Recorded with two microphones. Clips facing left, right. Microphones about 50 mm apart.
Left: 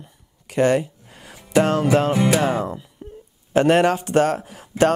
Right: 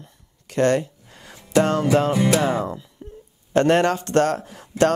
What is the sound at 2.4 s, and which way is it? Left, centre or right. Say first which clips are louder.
Music: left 1 dB; centre.